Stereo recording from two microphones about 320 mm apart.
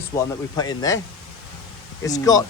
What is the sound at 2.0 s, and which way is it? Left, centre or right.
Speech, centre.